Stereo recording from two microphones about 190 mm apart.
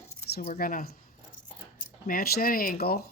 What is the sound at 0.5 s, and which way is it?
Speech, 50° left (ahead or behind).